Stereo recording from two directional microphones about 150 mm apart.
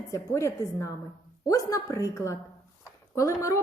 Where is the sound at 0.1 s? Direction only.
20° left (ahead or behind).